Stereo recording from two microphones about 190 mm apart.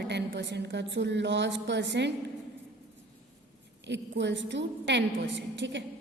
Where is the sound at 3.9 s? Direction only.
70° right (ahead or behind).